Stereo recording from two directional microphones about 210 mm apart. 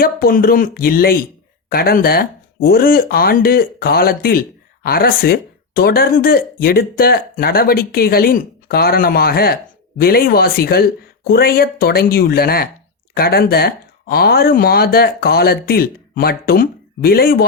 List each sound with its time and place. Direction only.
0.0 s speech: 45° left (ahead or behind)